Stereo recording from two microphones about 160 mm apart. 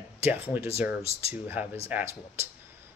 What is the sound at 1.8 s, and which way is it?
Speech, 15° right (ahead or behind).